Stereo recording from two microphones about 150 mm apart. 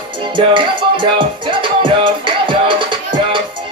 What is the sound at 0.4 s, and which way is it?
Music, 35° right (ahead or behind).